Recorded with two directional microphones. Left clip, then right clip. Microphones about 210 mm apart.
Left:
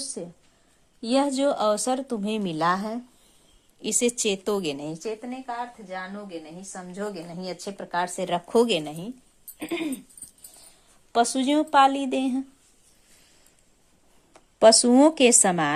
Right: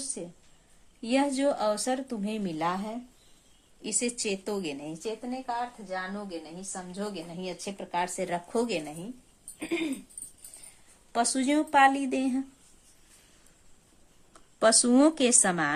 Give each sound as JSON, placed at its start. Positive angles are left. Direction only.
{"t": 1.0, "sound": "speech", "side_deg": 25}
{"t": 5.5, "sound": "a woman's voice", "side_deg": 15}
{"t": 6.7, "sound": "speech", "side_deg": 30}
{"t": 9.6, "sound": "a sound", "side_deg": 45}
{"t": 11.1, "sound": "a woman's voice", "side_deg": 20}
{"t": 14.3, "sound": "speech", "side_deg": 20}